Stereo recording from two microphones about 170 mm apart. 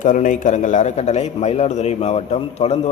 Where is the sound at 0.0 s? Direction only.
50° left (ahead or behind).